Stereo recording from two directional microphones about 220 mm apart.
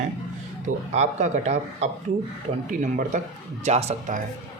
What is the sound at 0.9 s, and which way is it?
Speech, 30° right (ahead or behind).